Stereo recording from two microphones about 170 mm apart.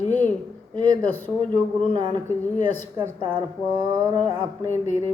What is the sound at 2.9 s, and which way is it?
Speech, 25° right (ahead or behind).